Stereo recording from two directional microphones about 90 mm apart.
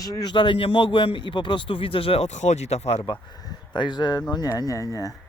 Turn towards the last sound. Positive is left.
turn(degrees=40)  # may be behind; listen again after turning